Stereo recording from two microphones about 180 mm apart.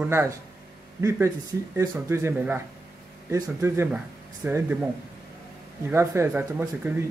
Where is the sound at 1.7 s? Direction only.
15° right (ahead or behind).